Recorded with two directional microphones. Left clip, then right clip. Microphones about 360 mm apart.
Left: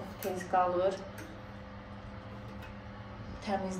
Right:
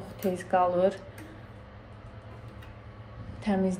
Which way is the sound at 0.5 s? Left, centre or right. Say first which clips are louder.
Right 4 dB; right.